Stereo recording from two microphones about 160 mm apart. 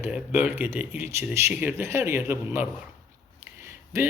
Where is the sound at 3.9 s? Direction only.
20° right (ahead or behind).